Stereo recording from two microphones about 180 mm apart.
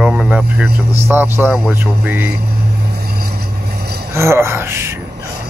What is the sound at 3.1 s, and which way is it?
Vehicle, 60° right (ahead or behind).